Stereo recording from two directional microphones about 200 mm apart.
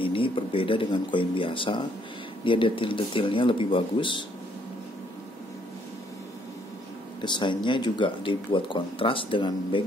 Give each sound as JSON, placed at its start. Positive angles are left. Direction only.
{"t": 0.0, "sound": "speech", "side_deg": 25}
{"t": 7.2, "sound": "speech", "side_deg": 25}